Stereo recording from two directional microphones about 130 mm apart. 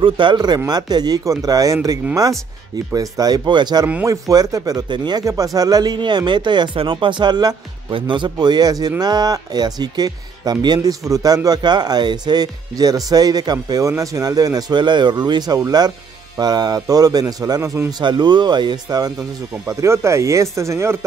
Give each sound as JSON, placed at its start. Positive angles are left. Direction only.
{"t": 0.0, "sound": "speech", "side_deg": -40}
{"t": 3.8, "sound": "speech", "side_deg": -20}